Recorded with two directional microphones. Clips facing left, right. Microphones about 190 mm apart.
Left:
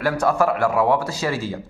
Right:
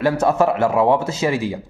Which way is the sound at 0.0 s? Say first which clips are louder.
Right 3 dB; 25° right (ahead or behind).